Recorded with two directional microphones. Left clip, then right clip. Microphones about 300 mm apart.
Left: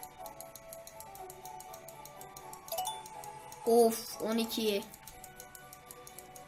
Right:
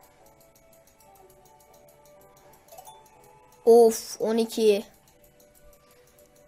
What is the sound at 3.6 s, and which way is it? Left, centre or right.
Speech, centre.